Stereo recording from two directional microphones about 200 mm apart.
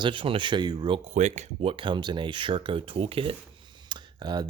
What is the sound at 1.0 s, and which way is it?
Speech, 35° right (ahead or behind).